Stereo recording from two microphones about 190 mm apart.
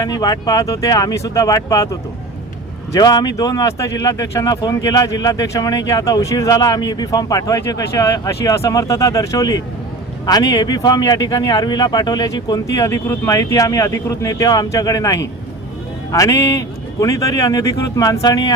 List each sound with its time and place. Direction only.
0.0 s a man's voice: 20° left (ahead or behind)